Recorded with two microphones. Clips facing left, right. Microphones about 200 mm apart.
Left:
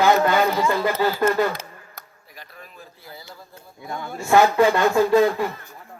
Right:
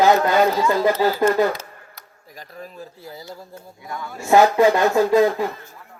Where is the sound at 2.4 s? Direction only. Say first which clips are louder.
Right 7 dB; 40° right (ahead or behind).